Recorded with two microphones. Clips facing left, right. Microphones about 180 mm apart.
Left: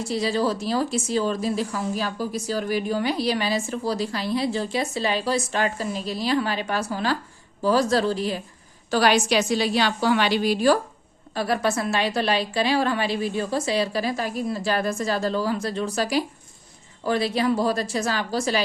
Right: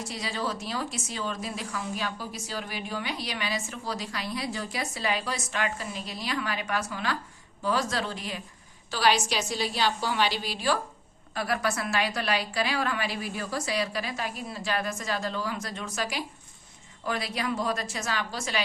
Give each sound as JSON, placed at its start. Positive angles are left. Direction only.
{"t": 0.0, "sound": "speech", "side_deg": 30}
{"t": 8.9, "sound": "a woman's voice", "side_deg": 50}
{"t": 11.3, "sound": "speech", "side_deg": 30}